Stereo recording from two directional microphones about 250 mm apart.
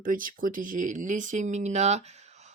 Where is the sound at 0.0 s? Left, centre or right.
Right.